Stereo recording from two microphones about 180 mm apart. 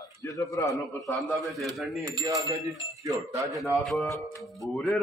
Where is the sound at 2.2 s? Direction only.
20° right (ahead or behind).